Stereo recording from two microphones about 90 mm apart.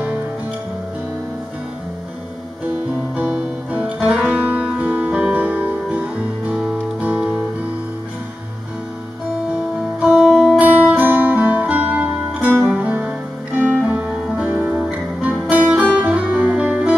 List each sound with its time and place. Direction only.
2.9 s music: 10° right (ahead or behind)
10.1 s music: centre (ahead or behind)
10.6 s music: 15° right (ahead or behind)